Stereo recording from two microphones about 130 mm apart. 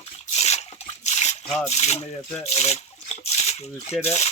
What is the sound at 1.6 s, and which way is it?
Speech, 55° left (ahead or behind).